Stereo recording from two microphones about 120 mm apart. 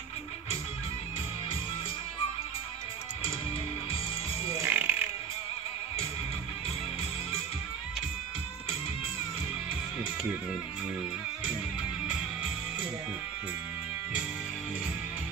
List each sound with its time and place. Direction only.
4.6 s music: 15° right (ahead or behind)